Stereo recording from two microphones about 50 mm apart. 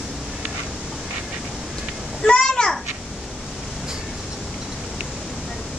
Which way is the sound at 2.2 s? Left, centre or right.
Centre.